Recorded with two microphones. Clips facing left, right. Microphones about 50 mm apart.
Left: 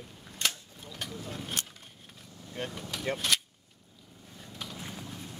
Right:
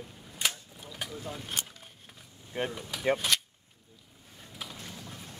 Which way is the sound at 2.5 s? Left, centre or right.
Centre.